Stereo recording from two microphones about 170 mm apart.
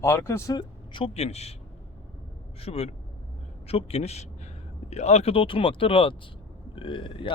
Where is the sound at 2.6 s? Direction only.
35° left (ahead or behind).